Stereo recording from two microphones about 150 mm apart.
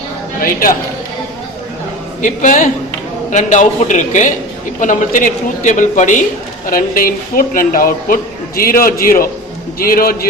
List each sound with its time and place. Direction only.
0.4 s a man's voice: 70° left (ahead or behind)
2.2 s a man's voice: 55° left (ahead or behind)
6.7 s a man's voice: 70° left (ahead or behind)